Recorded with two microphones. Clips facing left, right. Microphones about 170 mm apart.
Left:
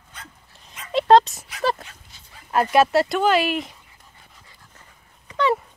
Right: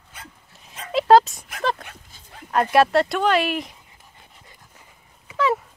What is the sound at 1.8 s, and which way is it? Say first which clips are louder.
Dog: right 2 dB; 60° right (ahead or behind).